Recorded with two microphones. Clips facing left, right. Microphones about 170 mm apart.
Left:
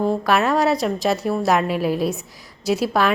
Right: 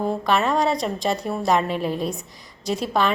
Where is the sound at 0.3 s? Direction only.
5° left (ahead or behind).